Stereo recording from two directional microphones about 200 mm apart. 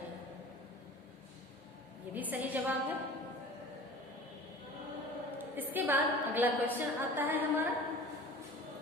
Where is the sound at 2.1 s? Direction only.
10° right (ahead or behind).